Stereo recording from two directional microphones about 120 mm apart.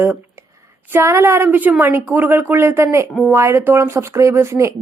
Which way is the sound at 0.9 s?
25° right (ahead or behind).